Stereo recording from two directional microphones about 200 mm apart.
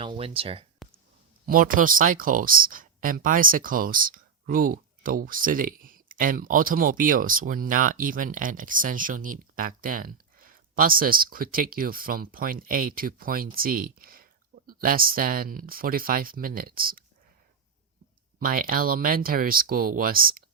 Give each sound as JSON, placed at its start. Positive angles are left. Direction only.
{"t": 0.0, "sound": "speech", "side_deg": -25}
{"t": 0.8, "sound": "a sound", "side_deg": 0}
{"t": 1.5, "sound": "speech", "side_deg": -45}
{"t": 18.3, "sound": "speech", "side_deg": -45}